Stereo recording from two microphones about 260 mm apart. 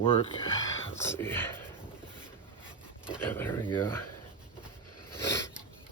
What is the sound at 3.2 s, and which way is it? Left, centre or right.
Speech, centre.